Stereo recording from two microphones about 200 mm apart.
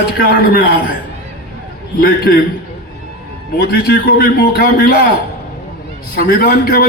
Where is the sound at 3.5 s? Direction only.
50° left (ahead or behind).